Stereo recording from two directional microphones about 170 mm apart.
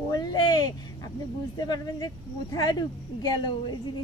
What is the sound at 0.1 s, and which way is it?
Speech, 25° left (ahead or behind).